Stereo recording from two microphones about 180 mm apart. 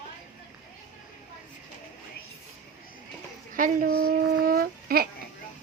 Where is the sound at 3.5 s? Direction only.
50° right (ahead or behind).